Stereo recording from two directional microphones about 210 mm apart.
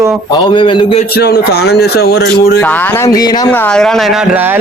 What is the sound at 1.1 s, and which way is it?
Speech, 50° left (ahead or behind).